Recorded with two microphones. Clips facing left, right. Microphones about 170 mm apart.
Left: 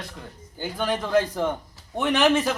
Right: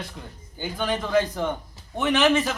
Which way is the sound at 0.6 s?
10° left (ahead or behind).